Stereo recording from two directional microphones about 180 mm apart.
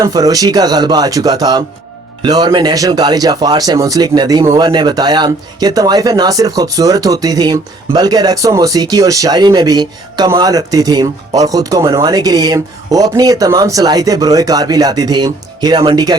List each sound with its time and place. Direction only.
0.0 s speech: 20° right (ahead or behind)